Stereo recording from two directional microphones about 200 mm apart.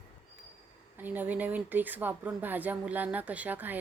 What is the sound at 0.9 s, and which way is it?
A woman's voice, 10° right (ahead or behind).